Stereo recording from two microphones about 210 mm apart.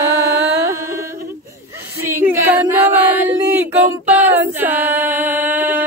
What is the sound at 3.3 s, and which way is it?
Female singing, 15° right (ahead or behind).